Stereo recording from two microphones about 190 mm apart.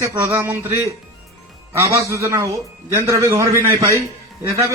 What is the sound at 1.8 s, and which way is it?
Speech, 15° right (ahead or behind).